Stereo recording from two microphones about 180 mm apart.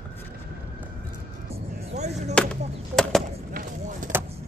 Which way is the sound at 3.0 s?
5° left (ahead or behind).